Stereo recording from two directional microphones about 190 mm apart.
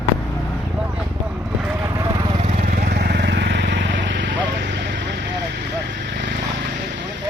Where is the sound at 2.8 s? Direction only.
60° right (ahead or behind).